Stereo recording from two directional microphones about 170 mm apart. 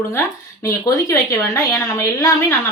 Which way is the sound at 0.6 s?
15° left (ahead or behind).